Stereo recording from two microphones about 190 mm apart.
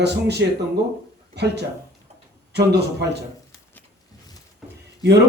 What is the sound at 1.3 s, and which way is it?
Speech, 60° right (ahead or behind).